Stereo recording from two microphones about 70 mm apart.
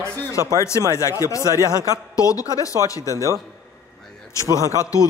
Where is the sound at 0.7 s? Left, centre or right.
Left.